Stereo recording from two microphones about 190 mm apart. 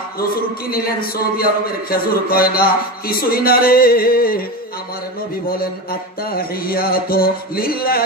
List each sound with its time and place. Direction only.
0.3 s a man's voice: 50° left (ahead or behind)
5.6 s a man's voice: 50° left (ahead or behind)